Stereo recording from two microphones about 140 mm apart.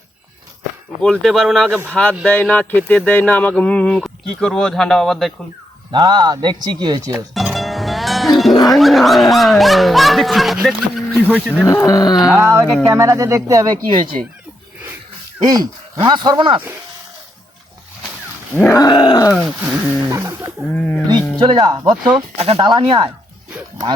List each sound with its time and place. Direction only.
1.2 s speech: centre (ahead or behind)
5.9 s speech: 30° right (ahead or behind)
7.3 s music: centre (ahead or behind)
8.7 s speech: centre (ahead or behind)
11.7 s dog: 25° left (ahead or behind)
12.4 s speech: 20° right (ahead or behind)
15.4 s speech: 30° right (ahead or behind)
18.7 s dog: 30° left (ahead or behind)
19.3 s speech: centre (ahead or behind)
20.1 s speech: 20° right (ahead or behind)
20.7 s speech: 10° left (ahead or behind)
21.1 s speech: 30° right (ahead or behind)